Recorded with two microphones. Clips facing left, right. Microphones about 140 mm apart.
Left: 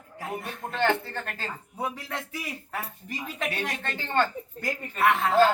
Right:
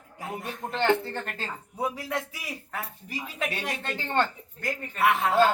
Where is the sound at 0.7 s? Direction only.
20° right (ahead or behind).